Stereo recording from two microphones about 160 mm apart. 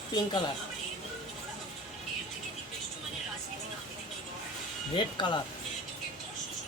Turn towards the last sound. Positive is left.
turn(degrees=30)  # may be behind; listen again after turning